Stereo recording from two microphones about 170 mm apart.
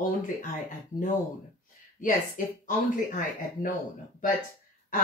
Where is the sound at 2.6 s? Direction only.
50° left (ahead or behind).